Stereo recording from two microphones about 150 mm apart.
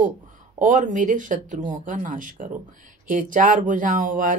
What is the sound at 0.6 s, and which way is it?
Speech, 60° right (ahead or behind).